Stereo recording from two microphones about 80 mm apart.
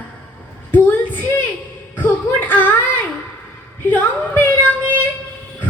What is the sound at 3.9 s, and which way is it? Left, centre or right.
Speech, left.